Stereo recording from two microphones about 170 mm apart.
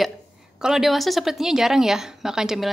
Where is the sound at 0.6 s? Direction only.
5° right (ahead or behind).